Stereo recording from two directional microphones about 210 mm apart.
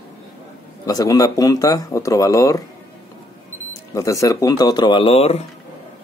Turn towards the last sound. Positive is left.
turn(degrees=30)  # may be behind; listen again after turning